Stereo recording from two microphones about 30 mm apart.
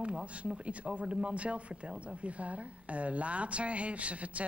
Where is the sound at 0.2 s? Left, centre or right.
Right.